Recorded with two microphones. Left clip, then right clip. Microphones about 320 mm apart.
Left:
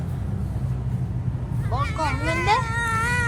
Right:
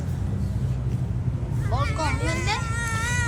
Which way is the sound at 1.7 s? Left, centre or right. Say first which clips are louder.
Left 2 dB; centre.